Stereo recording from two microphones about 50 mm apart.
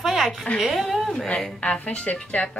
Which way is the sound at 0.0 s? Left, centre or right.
Centre.